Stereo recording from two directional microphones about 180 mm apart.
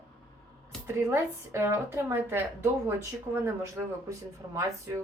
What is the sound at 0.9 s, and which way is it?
Speech, 15° right (ahead or behind).